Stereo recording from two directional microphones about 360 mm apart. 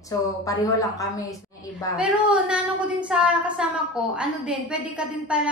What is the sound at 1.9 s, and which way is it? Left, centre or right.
A woman's voice, centre.